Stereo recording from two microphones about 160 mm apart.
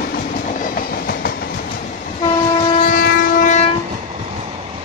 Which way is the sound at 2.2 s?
40° left (ahead or behind).